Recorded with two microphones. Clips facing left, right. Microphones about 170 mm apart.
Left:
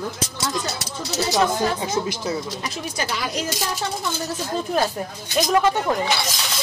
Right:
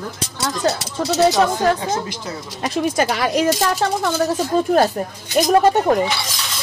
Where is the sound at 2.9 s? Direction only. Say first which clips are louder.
Right 8 dB; 70° right (ahead or behind).